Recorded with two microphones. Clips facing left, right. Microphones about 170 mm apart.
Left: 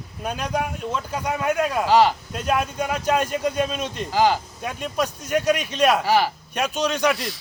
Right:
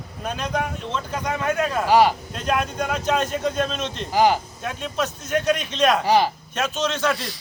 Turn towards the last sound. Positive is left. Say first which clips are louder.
# left 1 dB
turn(degrees=10)  # may be behind; listen again after turning